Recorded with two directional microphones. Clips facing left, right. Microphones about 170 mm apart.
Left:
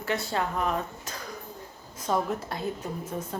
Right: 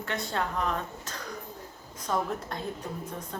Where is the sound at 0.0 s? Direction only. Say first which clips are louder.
Left 3 dB; 5° left (ahead or behind).